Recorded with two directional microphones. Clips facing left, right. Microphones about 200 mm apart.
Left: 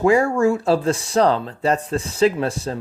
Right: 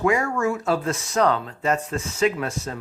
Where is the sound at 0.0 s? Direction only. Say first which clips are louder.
Left 6 dB; 30° left (ahead or behind).